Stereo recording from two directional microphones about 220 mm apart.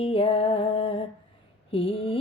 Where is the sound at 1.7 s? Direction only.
25° left (ahead or behind).